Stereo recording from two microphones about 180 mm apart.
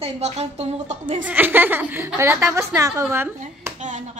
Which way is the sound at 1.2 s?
10° right (ahead or behind).